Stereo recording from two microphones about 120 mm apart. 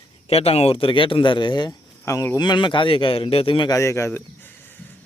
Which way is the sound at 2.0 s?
20° left (ahead or behind).